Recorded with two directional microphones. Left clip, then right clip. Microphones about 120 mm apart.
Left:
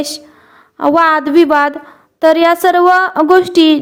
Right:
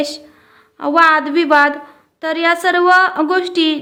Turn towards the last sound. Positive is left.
turn(degrees=70)  # may be behind; listen again after turning